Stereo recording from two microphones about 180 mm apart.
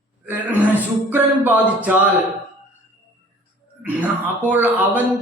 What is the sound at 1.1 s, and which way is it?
Speech, 10° right (ahead or behind).